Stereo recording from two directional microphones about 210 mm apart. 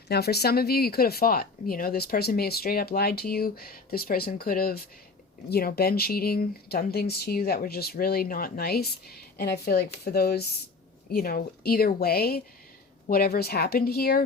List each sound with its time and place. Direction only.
0.1 s speech: 50° left (ahead or behind)